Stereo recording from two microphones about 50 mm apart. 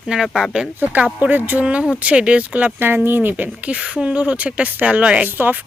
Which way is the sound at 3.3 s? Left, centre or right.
Right.